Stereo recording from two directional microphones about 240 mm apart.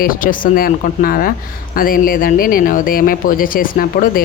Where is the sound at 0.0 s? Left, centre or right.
Left.